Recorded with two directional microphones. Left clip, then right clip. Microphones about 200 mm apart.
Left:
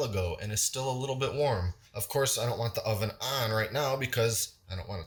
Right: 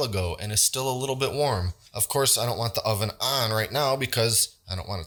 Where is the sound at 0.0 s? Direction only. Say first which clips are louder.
Right 4 dB; 35° right (ahead or behind).